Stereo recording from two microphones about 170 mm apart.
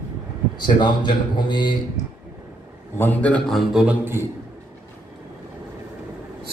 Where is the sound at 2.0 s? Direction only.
45° left (ahead or behind).